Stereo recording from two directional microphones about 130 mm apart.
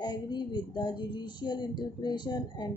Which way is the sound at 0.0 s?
35° left (ahead or behind).